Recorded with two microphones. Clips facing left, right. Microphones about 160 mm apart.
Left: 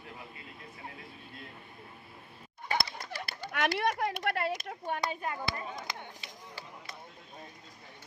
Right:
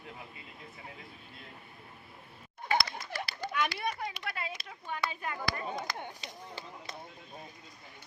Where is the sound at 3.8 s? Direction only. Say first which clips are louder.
Left 6 dB; 85° left.